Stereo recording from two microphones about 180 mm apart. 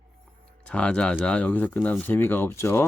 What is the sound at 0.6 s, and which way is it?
Speech, 5° left (ahead or behind).